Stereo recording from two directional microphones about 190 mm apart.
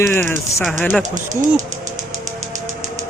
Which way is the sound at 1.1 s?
40° right (ahead or behind).